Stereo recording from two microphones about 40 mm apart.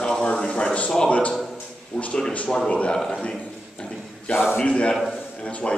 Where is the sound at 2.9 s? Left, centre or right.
Centre.